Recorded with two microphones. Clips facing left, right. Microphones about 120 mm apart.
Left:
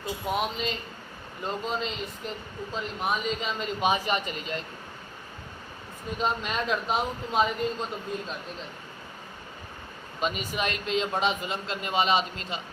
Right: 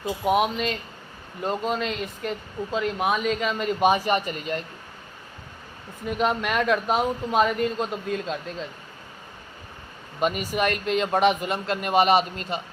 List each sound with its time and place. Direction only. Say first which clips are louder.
0.3 s a man's voice: right 7 dB; 60° right (ahead or behind)
2.7 s speech: right 6 dB; 80° right; by 4.6 s 50° right (ahead or behind)
6.1 s a man's voice: right 5 dB; 65° right (ahead or behind); by 8.4 s 90° right
10.2 s a man's voice: right 5 dB; 50° right (ahead or behind)